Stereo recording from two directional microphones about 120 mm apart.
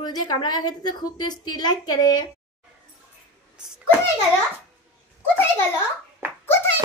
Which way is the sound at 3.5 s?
5° right (ahead or behind).